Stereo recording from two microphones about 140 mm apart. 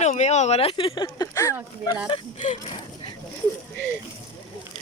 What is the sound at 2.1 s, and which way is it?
Speech, 40° left (ahead or behind).